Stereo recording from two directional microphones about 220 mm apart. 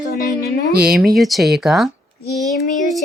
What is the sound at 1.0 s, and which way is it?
Speech, centre (ahead or behind).